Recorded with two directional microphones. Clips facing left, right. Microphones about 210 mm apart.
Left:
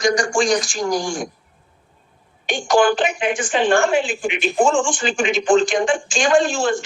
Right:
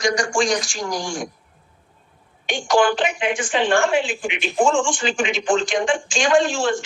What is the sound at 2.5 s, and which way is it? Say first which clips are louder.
A woman's voice: left 2 dB; 45° left (ahead or behind).